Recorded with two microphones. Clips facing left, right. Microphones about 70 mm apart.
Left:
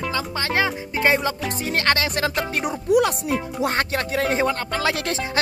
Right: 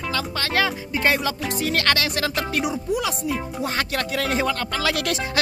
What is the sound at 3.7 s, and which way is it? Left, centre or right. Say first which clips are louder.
Speech: left 2 dB; left.